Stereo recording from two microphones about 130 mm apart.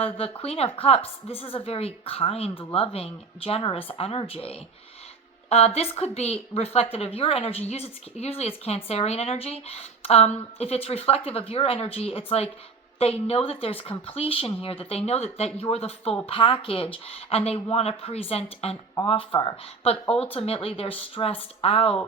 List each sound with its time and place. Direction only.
0.0 s a woman's voice: 50° left (ahead or behind)
19.8 s a woman's voice: 50° left (ahead or behind)